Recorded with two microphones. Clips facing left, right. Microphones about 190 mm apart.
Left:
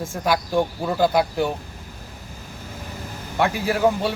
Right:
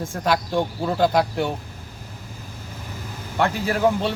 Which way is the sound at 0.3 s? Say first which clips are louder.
Left 1 dB; centre (ahead or behind).